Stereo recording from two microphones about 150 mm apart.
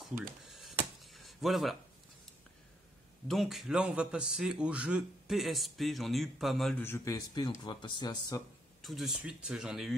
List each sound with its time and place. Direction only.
0.5 s a sound: centre (ahead or behind)
3.3 s a man's voice: centre (ahead or behind)
6.8 s speech: 20° left (ahead or behind)
8.8 s a man's voice: centre (ahead or behind)